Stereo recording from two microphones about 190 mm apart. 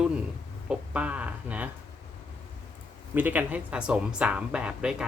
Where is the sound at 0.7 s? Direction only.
5° right (ahead or behind).